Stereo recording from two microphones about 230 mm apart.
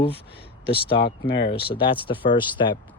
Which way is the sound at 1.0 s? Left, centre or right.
Left.